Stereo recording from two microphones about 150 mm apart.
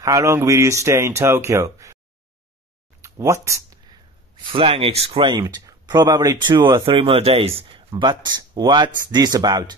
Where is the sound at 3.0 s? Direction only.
20° right (ahead or behind).